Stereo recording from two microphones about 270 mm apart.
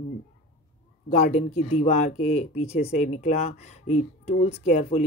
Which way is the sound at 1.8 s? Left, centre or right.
Left.